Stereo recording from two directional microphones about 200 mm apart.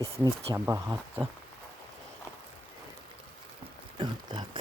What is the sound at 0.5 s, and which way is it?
Speech, 15° right (ahead or behind).